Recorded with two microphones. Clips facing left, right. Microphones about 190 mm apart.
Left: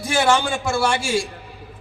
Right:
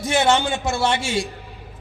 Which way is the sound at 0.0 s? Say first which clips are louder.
Even; 25° right (ahead or behind).